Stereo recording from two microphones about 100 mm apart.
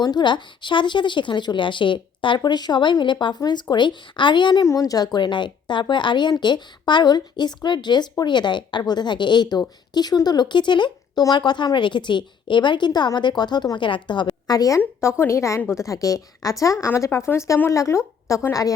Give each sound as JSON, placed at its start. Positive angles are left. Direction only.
{"t": 0.0, "sound": "a woman's voice", "side_deg": 45}
{"t": 4.6, "sound": "a woman's voice", "side_deg": 35}